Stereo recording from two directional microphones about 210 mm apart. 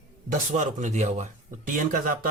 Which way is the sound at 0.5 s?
35° right (ahead or behind).